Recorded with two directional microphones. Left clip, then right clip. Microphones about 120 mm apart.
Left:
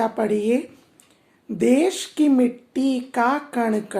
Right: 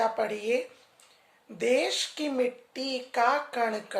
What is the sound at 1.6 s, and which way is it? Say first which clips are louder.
Speech: left 6 dB; 40° left (ahead or behind).